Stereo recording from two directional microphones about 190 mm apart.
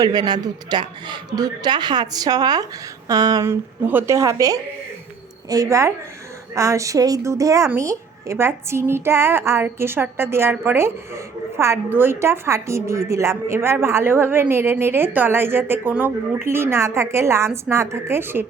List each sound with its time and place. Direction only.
0.0 s a man's voice: 20° right (ahead or behind)